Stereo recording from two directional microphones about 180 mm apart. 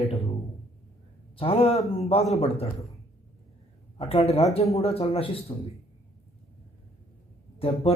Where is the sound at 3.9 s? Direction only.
35° left (ahead or behind).